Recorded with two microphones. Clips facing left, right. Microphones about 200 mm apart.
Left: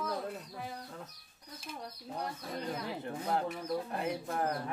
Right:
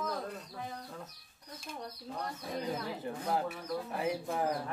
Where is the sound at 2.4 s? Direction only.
Centre (ahead or behind).